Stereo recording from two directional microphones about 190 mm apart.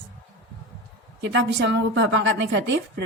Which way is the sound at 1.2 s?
70° right (ahead or behind).